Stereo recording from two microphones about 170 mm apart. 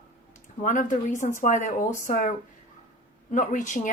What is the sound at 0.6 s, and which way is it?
Speech, 50° left (ahead or behind).